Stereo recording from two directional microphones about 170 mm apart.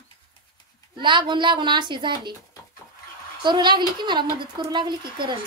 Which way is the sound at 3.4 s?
25° right (ahead or behind).